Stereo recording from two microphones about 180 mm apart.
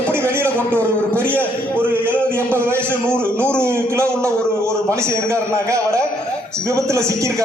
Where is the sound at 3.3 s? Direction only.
5° left (ahead or behind).